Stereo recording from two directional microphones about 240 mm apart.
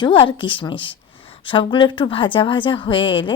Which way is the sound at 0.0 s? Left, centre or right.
Left.